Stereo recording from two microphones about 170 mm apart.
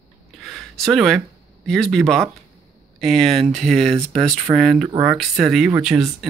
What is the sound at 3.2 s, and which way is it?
Speech, 35° right (ahead or behind).